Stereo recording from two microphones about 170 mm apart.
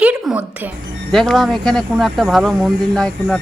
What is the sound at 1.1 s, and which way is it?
A woman's voice, centre (ahead or behind).